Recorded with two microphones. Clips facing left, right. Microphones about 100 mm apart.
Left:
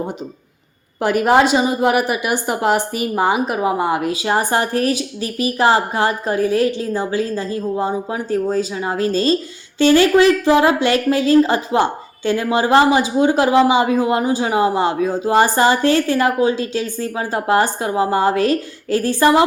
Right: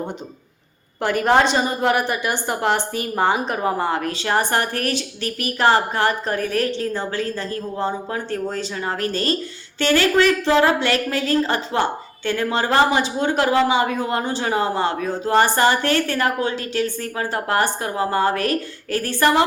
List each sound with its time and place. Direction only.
1.0 s a woman's voice: 15° left (ahead or behind)